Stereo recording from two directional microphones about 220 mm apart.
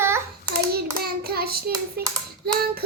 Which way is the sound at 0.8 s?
45° right (ahead or behind).